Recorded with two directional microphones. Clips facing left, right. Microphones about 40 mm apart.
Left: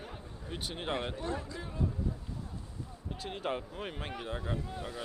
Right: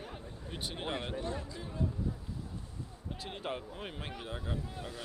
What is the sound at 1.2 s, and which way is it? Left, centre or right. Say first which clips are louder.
Speech: left 2 dB; left.